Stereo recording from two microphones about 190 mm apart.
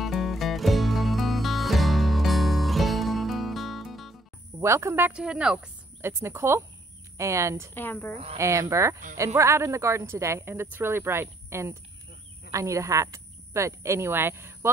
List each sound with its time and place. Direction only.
0.0 s music: centre (ahead or behind)
4.6 s speech: 15° right (ahead or behind)
7.7 s speech: 10° left (ahead or behind)
8.4 s speech: 15° right (ahead or behind)